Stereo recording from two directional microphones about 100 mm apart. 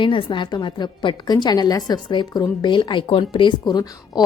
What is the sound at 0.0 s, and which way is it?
A woman's voice, 55° left (ahead or behind).